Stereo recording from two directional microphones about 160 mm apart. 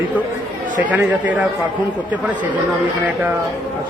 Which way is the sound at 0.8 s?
10° right (ahead or behind).